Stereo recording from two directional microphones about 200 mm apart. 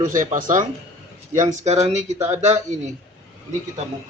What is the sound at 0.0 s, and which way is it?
Speech, 40° right (ahead or behind).